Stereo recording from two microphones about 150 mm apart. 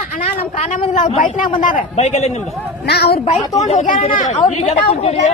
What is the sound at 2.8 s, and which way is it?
Speech, 90° left.